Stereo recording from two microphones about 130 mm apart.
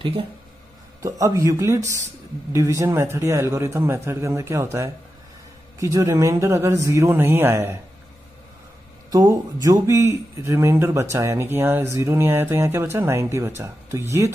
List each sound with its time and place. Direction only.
1.0 s speech: 25° right (ahead or behind)
9.1 s speech: 25° right (ahead or behind)